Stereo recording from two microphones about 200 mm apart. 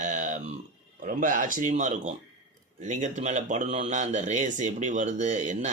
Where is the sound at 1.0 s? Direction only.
40° right (ahead or behind).